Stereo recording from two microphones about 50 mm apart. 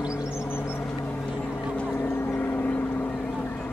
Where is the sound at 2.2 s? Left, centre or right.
Left.